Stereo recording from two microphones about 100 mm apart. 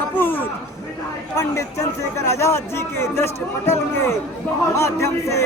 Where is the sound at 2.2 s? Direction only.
30° left (ahead or behind).